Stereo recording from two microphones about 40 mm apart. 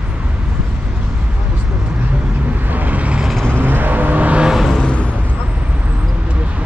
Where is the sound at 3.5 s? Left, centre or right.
Right.